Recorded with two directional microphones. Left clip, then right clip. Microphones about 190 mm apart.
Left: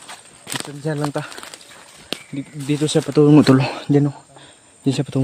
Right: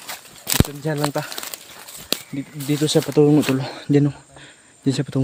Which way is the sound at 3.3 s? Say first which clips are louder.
Left 5 dB; 50° left (ahead or behind).